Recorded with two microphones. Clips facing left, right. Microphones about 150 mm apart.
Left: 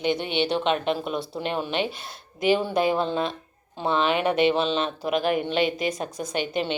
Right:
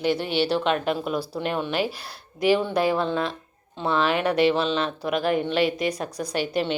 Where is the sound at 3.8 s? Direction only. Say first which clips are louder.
Even; 25° left (ahead or behind).